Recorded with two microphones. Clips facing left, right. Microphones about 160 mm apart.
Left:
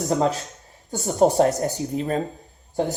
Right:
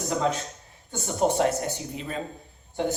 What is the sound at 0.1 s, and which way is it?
Speech, 40° left (ahead or behind).